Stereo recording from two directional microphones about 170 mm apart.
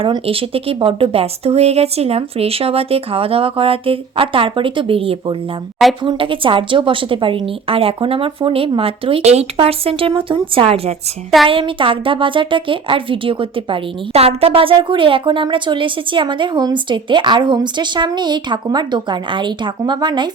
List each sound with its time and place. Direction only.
0.0 s a woman's voice: 35° right (ahead or behind)